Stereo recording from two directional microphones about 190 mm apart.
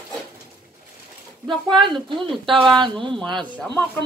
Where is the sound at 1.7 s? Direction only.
25° right (ahead or behind).